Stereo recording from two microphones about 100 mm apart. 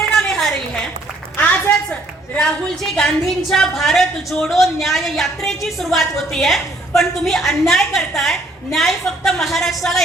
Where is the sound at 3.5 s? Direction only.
5° left (ahead or behind).